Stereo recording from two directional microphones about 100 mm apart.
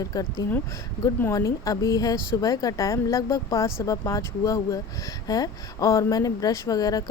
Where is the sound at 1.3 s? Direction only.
35° left (ahead or behind).